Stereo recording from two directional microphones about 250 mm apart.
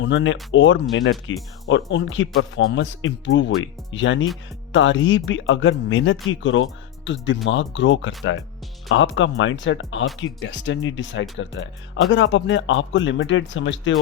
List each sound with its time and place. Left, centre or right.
0.0 s speech: left